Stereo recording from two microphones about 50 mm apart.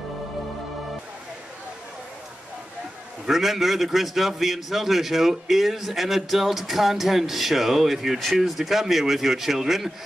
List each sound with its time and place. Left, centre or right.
3.3 s speech: centre